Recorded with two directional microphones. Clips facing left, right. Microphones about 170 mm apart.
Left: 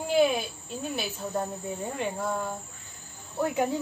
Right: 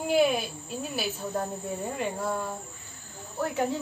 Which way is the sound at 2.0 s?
Centre (ahead or behind).